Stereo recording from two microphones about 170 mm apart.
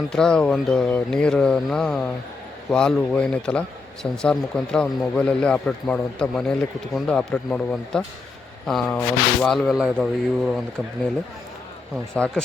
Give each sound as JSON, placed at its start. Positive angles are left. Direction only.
{"t": 0.1, "sound": "a man's voice", "side_deg": 5}
{"t": 12.1, "sound": "speech", "side_deg": 5}